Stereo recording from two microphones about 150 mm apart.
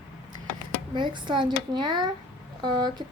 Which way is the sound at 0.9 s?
30° right (ahead or behind).